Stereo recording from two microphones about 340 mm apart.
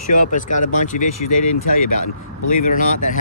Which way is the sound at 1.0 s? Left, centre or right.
Left.